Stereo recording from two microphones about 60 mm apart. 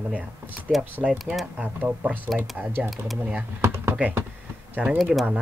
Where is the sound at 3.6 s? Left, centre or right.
Right.